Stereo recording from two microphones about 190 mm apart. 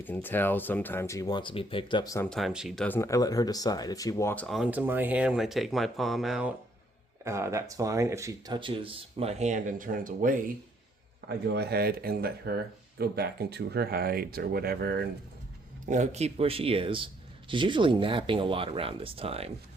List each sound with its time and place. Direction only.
0.0 s speech: 10° left (ahead or behind); by 2.1 s 25° left (ahead or behind)
2.1 s speech: 5° left (ahead or behind)
4.4 s speech: 5° right (ahead or behind)
7.3 s speech: 15° right (ahead or behind); by 10.3 s 45° right (ahead or behind)
11.4 s speech: 60° right (ahead or behind)
15.9 s speech: 35° right (ahead or behind)